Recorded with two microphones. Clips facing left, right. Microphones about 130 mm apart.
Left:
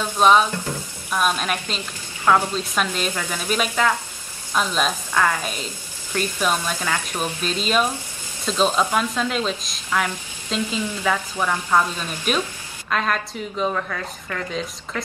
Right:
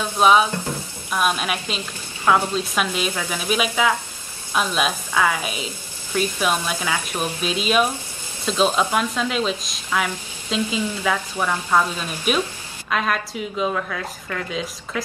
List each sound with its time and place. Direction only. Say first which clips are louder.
0.0 s a woman's voice: even; 10° right (ahead or behind)